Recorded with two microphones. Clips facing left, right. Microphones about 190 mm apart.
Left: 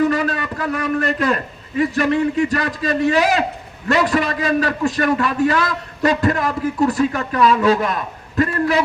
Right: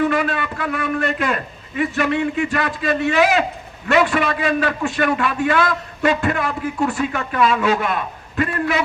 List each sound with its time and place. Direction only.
0.0 s a man's voice: 40° left (ahead or behind)